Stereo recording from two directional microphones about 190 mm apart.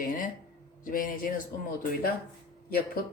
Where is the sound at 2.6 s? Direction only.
55° left (ahead or behind).